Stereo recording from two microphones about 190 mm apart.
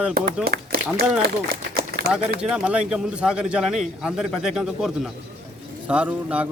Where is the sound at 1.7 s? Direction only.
55° right (ahead or behind).